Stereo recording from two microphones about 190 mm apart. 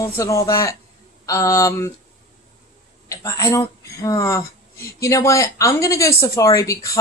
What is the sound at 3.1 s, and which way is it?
A woman's voice, 15° left (ahead or behind).